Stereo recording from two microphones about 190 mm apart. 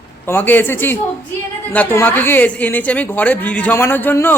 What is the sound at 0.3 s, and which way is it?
Speech, 10° left (ahead or behind).